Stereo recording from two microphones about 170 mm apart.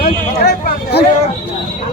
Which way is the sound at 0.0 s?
65° left (ahead or behind).